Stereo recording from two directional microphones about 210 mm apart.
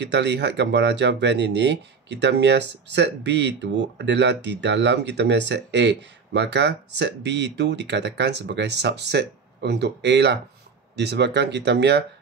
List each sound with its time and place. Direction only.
0.0 s speech: 55° right (ahead or behind)